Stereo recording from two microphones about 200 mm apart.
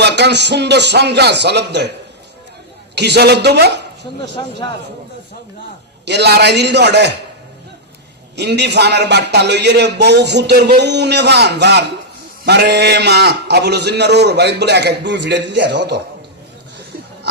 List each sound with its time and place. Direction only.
0.0 s a man's voice: 55° right (ahead or behind)
2.9 s a man's voice: 55° right (ahead or behind)
6.1 s a man's voice: 55° right (ahead or behind)
8.4 s a man's voice: 60° right (ahead or behind)